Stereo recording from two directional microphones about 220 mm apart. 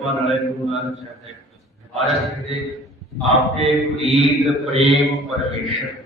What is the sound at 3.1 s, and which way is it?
A man's voice, centre (ahead or behind).